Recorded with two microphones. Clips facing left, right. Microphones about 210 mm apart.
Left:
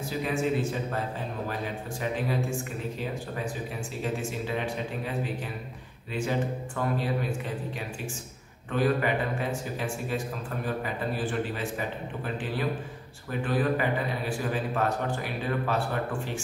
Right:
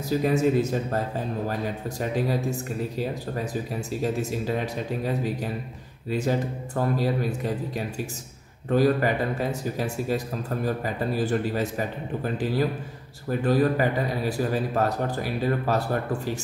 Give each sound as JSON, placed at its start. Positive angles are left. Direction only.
{"t": 0.2, "sound": "speech", "side_deg": -40}